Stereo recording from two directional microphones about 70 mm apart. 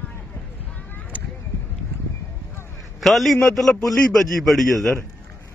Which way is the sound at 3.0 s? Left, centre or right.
Centre.